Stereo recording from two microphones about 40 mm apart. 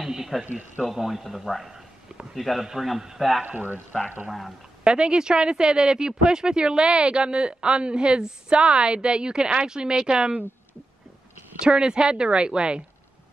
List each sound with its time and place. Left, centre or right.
0.0 s a sound: centre
0.5 s a man's voice: right
0.8 s a man's voice: centre
2.6 s a man's voice: centre
3.4 s a man's voice: right
4.8 s speech: right
11.6 s speech: right